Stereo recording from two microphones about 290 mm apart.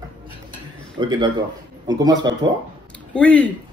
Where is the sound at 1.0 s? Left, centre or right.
Centre.